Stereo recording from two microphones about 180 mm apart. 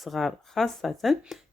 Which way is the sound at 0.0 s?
Centre (ahead or behind).